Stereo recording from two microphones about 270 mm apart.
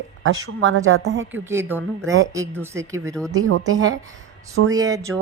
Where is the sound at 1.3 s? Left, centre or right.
Centre.